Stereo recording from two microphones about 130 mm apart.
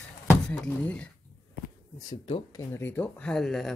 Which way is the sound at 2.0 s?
40° left (ahead or behind).